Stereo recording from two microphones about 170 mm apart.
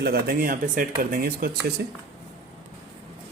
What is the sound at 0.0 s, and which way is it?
Speech, 65° right (ahead or behind).